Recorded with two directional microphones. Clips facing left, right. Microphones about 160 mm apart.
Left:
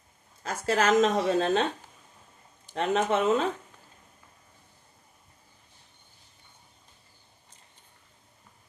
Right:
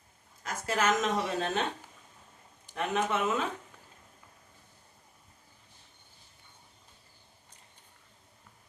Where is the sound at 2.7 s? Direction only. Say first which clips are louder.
Left 5 dB; 30° left (ahead or behind).